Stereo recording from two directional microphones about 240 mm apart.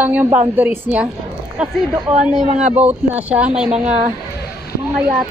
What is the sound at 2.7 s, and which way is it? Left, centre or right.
Speech, centre.